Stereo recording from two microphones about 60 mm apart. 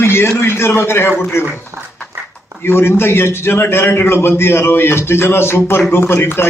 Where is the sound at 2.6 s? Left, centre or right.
Left.